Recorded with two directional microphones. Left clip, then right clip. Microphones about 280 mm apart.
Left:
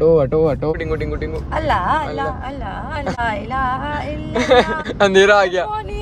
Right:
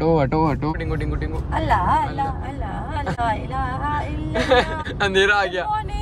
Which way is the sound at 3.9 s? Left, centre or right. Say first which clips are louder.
Left 1 dB; centre.